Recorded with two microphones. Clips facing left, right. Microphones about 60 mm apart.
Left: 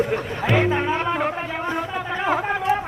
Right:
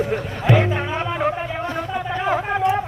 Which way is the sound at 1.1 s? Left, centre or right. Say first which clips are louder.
Right 1 dB; centre.